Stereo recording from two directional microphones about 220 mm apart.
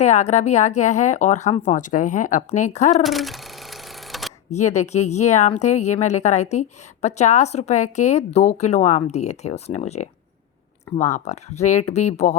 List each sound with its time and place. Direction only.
0.0 s a woman's voice: 30° left (ahead or behind)
3.0 s sewing machine: centre (ahead or behind)
4.4 s a woman's voice: 30° left (ahead or behind)